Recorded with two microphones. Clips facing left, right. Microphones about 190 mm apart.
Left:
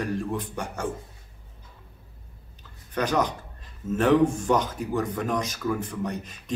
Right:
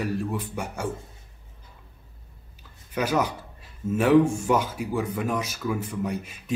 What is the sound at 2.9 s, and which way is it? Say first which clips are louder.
Beatboxing: even; 10° right (ahead or behind).